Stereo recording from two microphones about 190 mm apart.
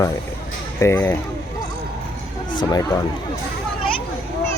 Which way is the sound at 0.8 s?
15° left (ahead or behind).